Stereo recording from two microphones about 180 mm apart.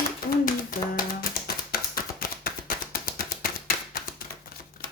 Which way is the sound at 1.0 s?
55° left (ahead or behind).